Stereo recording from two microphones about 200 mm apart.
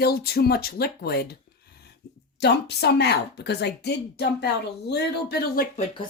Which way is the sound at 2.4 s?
55° left (ahead or behind).